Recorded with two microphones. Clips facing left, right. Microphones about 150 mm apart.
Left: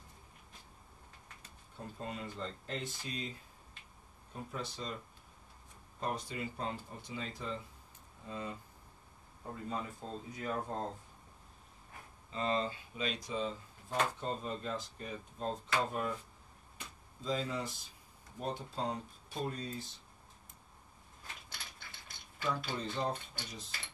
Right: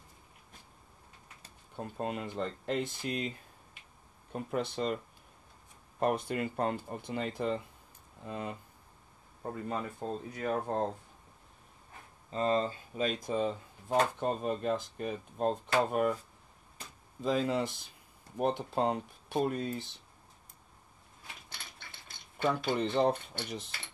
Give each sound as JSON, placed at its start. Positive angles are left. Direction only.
{"t": 1.8, "sound": "speech", "side_deg": -65}
{"t": 5.9, "sound": "speech", "side_deg": -60}
{"t": 12.3, "sound": "speech", "side_deg": -40}
{"t": 17.2, "sound": "speech", "side_deg": -65}
{"t": 22.4, "sound": "speech", "side_deg": -70}